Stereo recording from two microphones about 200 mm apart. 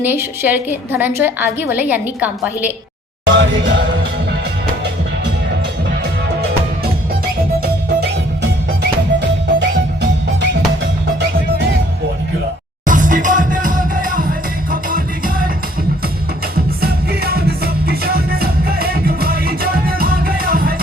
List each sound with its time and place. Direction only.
0.0 s a woman's voice: 10° right (ahead or behind)
3.3 s music: 65° right (ahead or behind)
9.6 s music: 60° right (ahead or behind)
12.8 s music: 40° right (ahead or behind)
16.6 s music: 50° right (ahead or behind)